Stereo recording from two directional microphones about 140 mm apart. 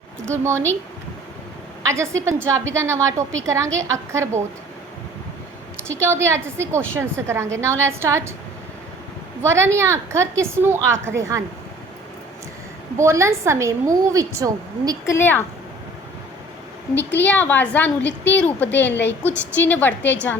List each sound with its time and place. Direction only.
0.3 s a woman's voice: 20° right (ahead or behind)
1.8 s a woman's voice: 20° right (ahead or behind)
6.0 s a woman's voice: 20° right (ahead or behind)
9.4 s a woman's voice: 20° right (ahead or behind)
13.0 s a woman's voice: 20° right (ahead or behind)
15.0 s a woman's voice: 15° left (ahead or behind)
16.9 s a woman's voice: 15° left (ahead or behind)